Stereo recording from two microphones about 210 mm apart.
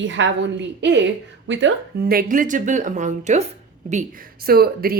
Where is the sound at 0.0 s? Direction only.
65° right (ahead or behind).